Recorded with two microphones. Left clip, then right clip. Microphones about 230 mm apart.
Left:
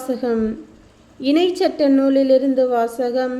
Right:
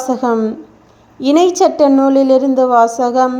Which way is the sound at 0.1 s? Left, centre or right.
Centre.